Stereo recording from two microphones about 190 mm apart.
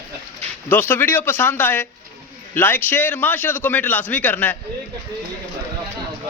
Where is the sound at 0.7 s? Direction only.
10° left (ahead or behind).